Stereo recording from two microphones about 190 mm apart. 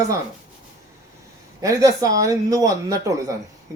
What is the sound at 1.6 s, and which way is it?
Speech, 20° right (ahead or behind).